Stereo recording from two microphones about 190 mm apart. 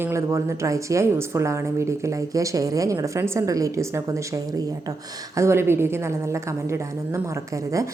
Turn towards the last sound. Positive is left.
turn(degrees=-15)  # may be behind; listen again after turning